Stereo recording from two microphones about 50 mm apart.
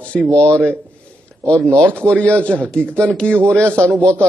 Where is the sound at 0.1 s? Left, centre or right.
Left.